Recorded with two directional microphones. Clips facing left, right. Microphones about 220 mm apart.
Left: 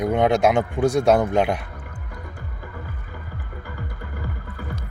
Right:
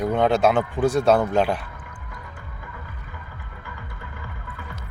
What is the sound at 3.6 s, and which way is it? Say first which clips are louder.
Music: left 3 dB; 40° left (ahead or behind).